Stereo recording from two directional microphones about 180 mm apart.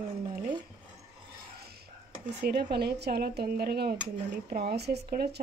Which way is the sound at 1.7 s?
50° right (ahead or behind).